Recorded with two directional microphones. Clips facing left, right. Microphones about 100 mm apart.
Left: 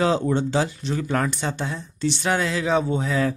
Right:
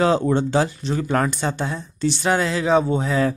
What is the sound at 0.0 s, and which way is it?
Speech, 50° right (ahead or behind).